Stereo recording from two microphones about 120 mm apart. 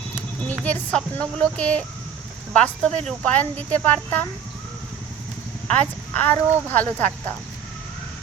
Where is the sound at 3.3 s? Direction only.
15° left (ahead or behind).